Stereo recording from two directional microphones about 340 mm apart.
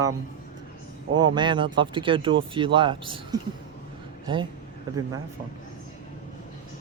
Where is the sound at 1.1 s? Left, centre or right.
Centre.